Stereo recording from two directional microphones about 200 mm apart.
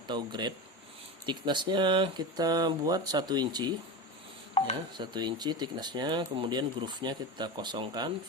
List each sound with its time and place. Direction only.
0.1 s speech: 20° right (ahead or behind)
4.5 s speech: 35° left (ahead or behind)
4.9 s speech: 20° right (ahead or behind)